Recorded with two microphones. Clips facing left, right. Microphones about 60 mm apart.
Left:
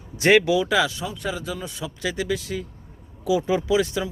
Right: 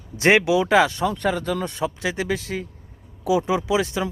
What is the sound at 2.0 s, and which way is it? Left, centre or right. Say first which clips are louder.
Speech: right 1 dB; right.